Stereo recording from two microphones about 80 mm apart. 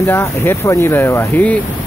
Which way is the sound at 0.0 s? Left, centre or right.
Left.